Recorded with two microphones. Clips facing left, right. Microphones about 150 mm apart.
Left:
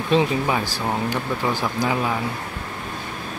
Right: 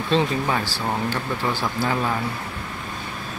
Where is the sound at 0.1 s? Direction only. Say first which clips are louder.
Left 2 dB; 10° left (ahead or behind).